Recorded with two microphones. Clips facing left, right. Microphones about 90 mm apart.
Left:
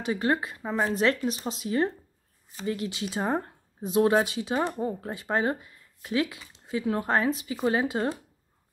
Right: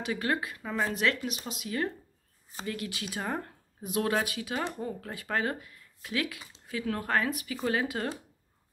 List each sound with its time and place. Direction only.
0.0 s speech: 30° left (ahead or behind)